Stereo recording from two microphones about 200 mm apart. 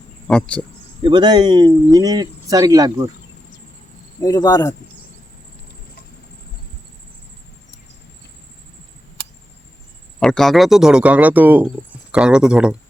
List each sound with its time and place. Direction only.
0.3 s speech: 5° left (ahead or behind)
1.0 s speech: 20° right (ahead or behind)
4.2 s speech: 20° left (ahead or behind)
10.2 s speech: centre (ahead or behind)